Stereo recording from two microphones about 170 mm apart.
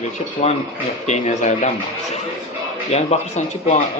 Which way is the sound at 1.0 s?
45° left (ahead or behind).